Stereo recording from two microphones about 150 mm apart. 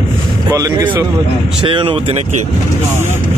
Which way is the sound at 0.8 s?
10° right (ahead or behind).